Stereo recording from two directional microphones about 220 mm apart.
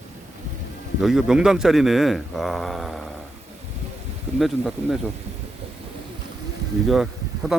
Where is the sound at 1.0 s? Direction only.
Centre (ahead or behind).